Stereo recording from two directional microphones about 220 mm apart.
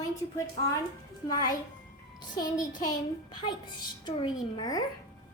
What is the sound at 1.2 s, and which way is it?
A woman's voice, 15° left (ahead or behind).